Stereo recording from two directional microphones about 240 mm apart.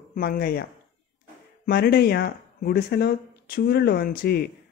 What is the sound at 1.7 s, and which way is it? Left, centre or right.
Speech, left.